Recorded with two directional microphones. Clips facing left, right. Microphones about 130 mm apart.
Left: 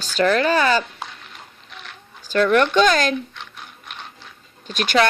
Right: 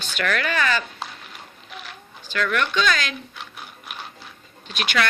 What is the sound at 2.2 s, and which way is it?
Speech, 40° left (ahead or behind).